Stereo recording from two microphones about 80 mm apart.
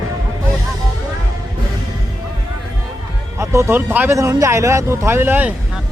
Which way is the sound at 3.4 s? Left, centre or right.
Right.